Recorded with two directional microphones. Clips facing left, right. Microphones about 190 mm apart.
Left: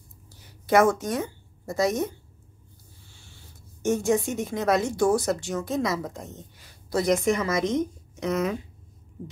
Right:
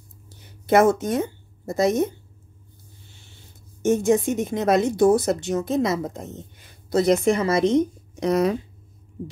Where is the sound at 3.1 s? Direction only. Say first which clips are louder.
Right 1 dB; 20° right (ahead or behind).